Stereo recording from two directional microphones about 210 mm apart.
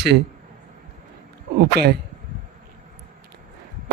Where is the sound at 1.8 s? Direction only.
50° right (ahead or behind).